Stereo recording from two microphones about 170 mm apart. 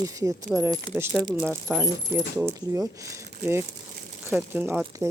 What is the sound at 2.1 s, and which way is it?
Speech, 15° right (ahead or behind).